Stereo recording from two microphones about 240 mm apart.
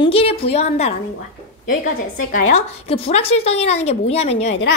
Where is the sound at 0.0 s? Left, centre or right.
Left.